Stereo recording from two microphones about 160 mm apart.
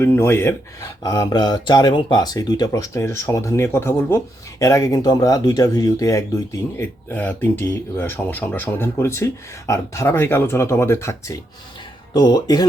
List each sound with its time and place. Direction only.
0.0 s speech: 15° left (ahead or behind)